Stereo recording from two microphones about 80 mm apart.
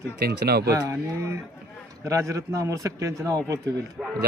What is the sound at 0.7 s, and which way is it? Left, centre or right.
A man's voice, right.